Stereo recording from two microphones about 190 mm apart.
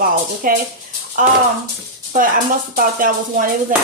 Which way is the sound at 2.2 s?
45° right (ahead or behind).